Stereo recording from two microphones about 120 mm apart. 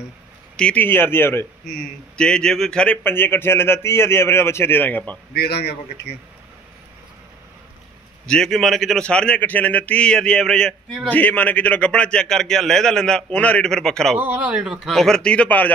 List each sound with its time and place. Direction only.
0.6 s a man's voice: 10° left (ahead or behind)
1.7 s a man's voice: 5° left (ahead or behind)
8.3 s a man's voice: 5° left (ahead or behind)
14.1 s a man's voice: 15° right (ahead or behind); by 15.7 s 10° left (ahead or behind)